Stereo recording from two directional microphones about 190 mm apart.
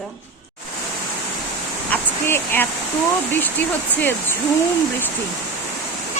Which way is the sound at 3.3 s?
10° left (ahead or behind).